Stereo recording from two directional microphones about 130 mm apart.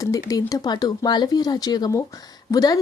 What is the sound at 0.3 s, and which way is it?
A woman's voice, 30° left (ahead or behind).